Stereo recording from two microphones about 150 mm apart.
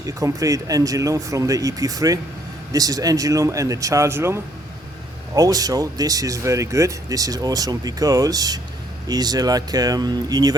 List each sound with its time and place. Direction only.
0.0 s speech: 20° right (ahead or behind)